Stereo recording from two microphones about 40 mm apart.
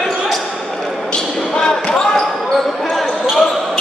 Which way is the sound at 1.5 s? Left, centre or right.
Centre.